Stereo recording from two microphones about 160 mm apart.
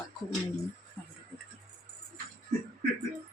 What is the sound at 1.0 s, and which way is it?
Music, 15° left (ahead or behind).